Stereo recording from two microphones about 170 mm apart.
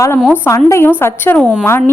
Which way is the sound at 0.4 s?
15° left (ahead or behind).